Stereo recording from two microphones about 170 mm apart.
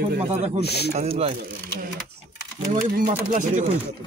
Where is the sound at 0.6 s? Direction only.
70° left (ahead or behind).